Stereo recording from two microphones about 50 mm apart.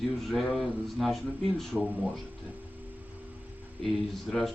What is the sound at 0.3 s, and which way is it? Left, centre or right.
Speech, centre.